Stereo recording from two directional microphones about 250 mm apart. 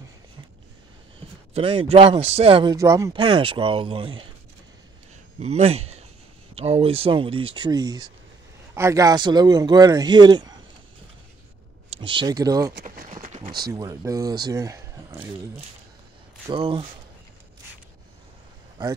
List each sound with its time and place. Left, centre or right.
1.5 s a man's voice: right
5.4 s a man's voice: right
11.9 s speech: right
12.8 s a sound: right
13.5 s speech: centre
16.4 s a man's voice: centre